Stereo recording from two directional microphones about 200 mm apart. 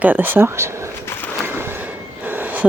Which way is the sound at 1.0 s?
10° left (ahead or behind).